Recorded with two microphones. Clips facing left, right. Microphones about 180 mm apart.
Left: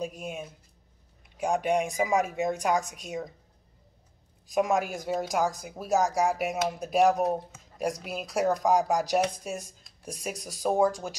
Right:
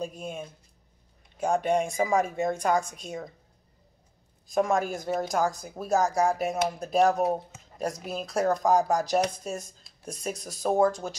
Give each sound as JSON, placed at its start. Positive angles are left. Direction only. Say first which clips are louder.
{"t": 0.2, "sound": "speech", "louder": "right 1 dB", "side_deg": 15}
{"t": 4.6, "sound": "speech", "louder": "right 1 dB", "side_deg": 10}
{"t": 7.2, "sound": "speech", "louder": "right 1 dB", "side_deg": -15}
{"t": 8.0, "sound": "speech", "louder": "right 3 dB", "side_deg": 10}